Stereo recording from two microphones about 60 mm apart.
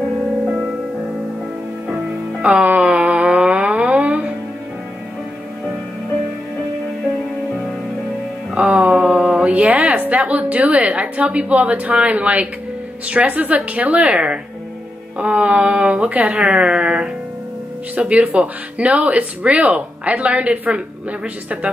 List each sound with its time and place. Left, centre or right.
2.4 s a sound: right
8.5 s music: right
9.2 s speech: centre